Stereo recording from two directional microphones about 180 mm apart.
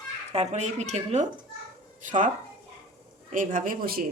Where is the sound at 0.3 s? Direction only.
40° right (ahead or behind).